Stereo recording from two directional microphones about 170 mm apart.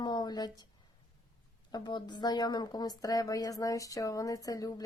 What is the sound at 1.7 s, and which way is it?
Speech, 25° left (ahead or behind).